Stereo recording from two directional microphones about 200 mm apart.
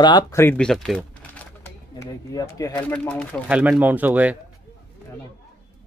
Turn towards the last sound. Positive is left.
turn(degrees=-10)  # may be behind; listen again after turning